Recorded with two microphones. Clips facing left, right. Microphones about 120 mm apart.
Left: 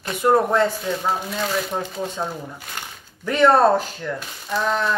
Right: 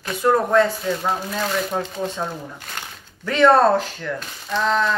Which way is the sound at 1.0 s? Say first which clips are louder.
Even; centre (ahead or behind).